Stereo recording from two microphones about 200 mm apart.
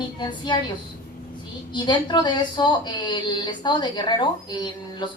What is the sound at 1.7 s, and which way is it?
A woman's voice, 20° left (ahead or behind).